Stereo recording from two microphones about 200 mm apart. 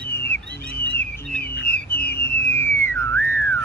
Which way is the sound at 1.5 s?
10° left (ahead or behind).